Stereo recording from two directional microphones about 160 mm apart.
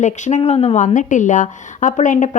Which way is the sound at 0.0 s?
50° left (ahead or behind).